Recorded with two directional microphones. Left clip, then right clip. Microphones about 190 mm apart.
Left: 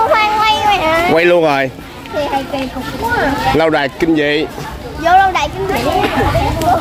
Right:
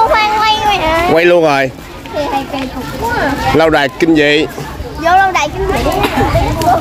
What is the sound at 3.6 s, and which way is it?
Speech, 10° right (ahead or behind).